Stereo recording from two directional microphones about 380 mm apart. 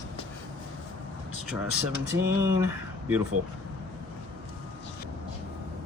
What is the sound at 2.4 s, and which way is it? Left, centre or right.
Speech, centre.